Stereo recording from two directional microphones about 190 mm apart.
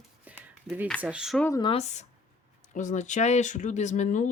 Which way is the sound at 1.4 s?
15° left (ahead or behind).